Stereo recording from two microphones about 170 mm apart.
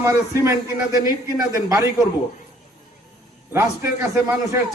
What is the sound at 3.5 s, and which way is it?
A man's voice, 15° right (ahead or behind).